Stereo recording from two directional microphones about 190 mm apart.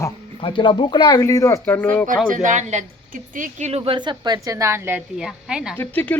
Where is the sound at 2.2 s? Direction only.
45° right (ahead or behind); by 5.7 s 5° right (ahead or behind).